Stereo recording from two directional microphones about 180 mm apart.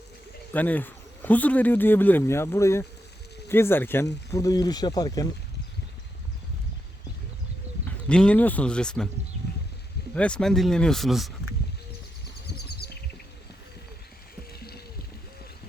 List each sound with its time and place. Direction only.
0.5 s speech: 10° left (ahead or behind)
7.9 s speech: 5° left (ahead or behind)
10.2 s speech: 5° left (ahead or behind)